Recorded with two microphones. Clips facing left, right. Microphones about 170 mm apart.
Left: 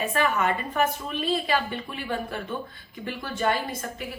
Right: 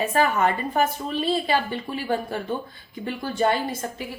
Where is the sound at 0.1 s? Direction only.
35° right (ahead or behind).